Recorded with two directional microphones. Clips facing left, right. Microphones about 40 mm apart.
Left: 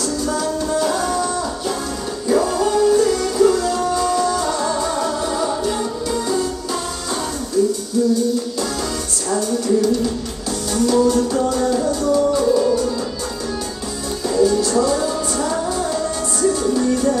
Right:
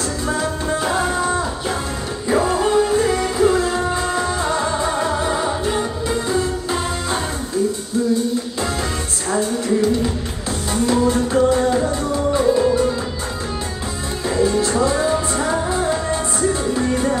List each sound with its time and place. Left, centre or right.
0.0 s music: right
9.3 s music: right
14.2 s music: right